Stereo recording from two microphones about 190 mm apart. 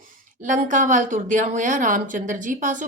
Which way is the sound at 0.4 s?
45° right (ahead or behind).